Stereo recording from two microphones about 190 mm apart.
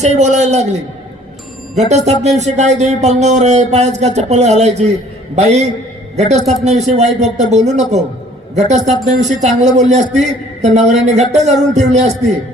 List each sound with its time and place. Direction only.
0.0 s speech: 35° right (ahead or behind)
2.2 s speech: 35° right (ahead or behind)